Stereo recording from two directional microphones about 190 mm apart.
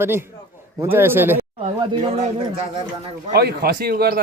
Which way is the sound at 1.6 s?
25° right (ahead or behind).